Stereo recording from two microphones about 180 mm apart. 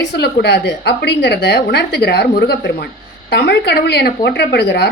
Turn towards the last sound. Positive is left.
turn(degrees=65)  # may be behind; listen again after turning